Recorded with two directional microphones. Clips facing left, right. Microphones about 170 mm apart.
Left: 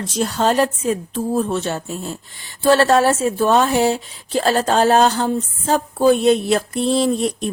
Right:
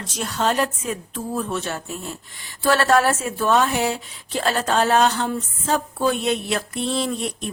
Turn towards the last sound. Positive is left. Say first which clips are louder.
# left 7 dB
turn(degrees=35)  # may be behind; listen again after turning